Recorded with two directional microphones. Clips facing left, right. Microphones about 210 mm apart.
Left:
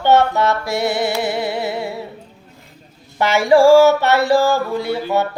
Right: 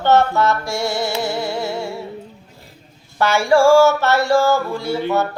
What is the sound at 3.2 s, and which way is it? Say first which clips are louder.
Music: left 2 dB; 20° left (ahead or behind).